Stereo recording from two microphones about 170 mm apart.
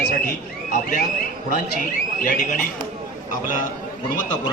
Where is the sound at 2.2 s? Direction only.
55° left (ahead or behind).